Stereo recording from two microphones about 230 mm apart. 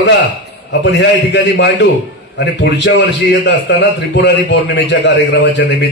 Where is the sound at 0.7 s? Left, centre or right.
Left.